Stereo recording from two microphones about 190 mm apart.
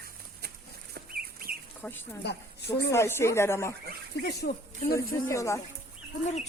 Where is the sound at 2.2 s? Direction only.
60° left (ahead or behind).